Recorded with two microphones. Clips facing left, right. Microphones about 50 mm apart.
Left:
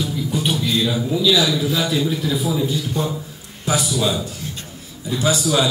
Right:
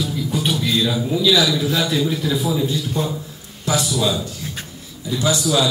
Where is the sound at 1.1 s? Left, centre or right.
Centre.